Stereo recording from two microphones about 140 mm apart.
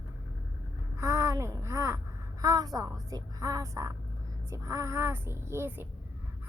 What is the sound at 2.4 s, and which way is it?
A woman's voice, 25° right (ahead or behind).